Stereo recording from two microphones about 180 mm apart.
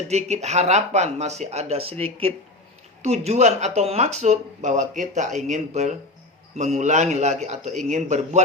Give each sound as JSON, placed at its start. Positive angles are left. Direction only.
{"t": 0.1, "sound": "speech", "side_deg": -40}